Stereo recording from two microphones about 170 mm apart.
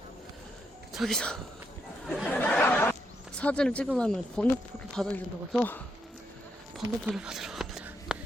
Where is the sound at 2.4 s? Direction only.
10° left (ahead or behind).